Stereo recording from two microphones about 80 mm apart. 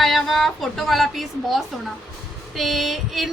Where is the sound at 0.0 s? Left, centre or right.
Centre.